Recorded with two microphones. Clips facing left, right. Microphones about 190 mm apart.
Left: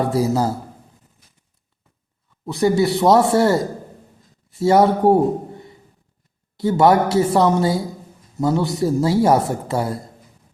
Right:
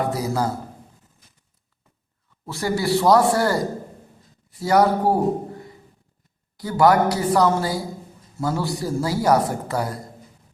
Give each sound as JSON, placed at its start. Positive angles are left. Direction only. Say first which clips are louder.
{"t": 0.0, "sound": "a woman's voice", "louder": "left 5 dB", "side_deg": 30}
{"t": 2.5, "sound": "a woman's voice", "louder": "left 5 dB", "side_deg": 20}